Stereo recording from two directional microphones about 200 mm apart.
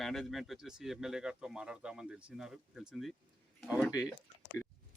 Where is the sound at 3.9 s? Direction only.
15° left (ahead or behind).